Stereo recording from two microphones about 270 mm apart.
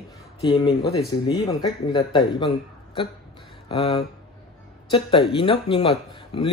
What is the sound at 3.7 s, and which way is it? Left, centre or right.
Speech, centre.